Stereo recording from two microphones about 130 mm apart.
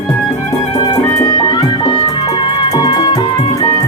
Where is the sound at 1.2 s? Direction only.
30° left (ahead or behind).